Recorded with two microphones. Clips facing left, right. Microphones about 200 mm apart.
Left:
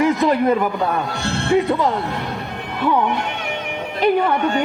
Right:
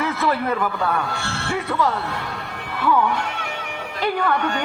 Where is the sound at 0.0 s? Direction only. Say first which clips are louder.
Left 6 dB; 15° left (ahead or behind).